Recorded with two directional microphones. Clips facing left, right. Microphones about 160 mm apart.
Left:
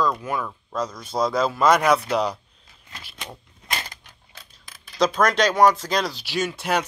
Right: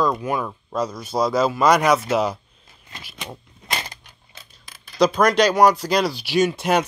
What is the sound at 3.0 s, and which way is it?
Scissors, 5° right (ahead or behind).